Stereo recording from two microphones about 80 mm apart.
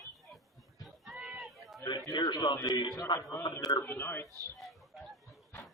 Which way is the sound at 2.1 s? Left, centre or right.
Left.